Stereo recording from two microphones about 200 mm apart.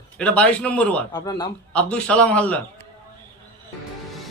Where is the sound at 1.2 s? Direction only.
20° left (ahead or behind).